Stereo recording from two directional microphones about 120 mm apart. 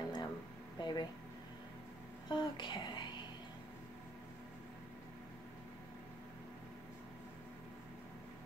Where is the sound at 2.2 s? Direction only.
40° left (ahead or behind).